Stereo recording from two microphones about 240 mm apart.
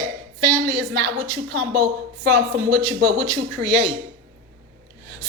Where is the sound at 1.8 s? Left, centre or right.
Right.